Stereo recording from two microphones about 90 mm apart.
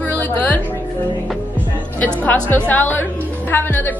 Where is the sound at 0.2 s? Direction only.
20° left (ahead or behind).